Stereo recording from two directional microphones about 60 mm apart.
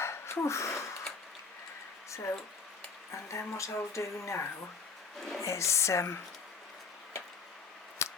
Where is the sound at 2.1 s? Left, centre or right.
Left.